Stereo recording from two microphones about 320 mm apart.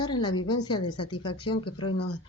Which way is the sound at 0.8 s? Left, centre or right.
Left.